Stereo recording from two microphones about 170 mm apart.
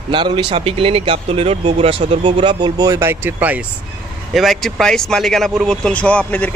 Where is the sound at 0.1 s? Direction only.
30° right (ahead or behind); by 3.6 s 10° right (ahead or behind).